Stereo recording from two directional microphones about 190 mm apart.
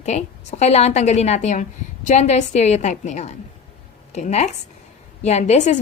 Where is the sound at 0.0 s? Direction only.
35° left (ahead or behind).